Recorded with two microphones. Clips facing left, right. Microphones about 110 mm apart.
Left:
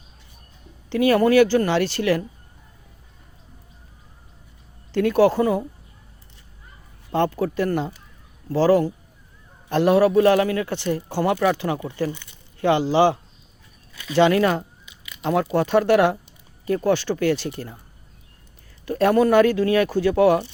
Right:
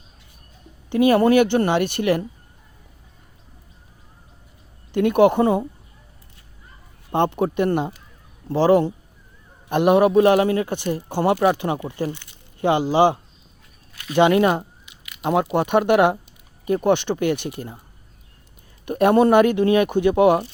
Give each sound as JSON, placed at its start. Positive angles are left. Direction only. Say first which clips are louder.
{"t": 0.9, "sound": "speech", "louder": "right 2 dB", "side_deg": -20}
{"t": 4.9, "sound": "speech", "louder": "right 2 dB", "side_deg": -20}
{"t": 7.1, "sound": "speech", "louder": "right 2 dB", "side_deg": -20}
{"t": 10.7, "sound": "speech", "louder": "even", "side_deg": -15}
{"t": 11.2, "sound": "speech", "louder": "right 3 dB", "side_deg": -25}
{"t": 18.9, "sound": "speech", "louder": "right 2 dB", "side_deg": -20}